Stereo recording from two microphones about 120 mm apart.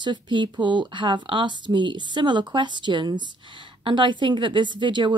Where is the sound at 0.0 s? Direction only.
40° right (ahead or behind).